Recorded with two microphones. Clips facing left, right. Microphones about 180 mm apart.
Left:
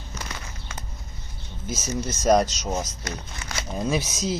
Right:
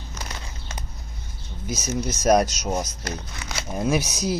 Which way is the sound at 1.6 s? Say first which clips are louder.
Right 2 dB; centre (ahead or behind).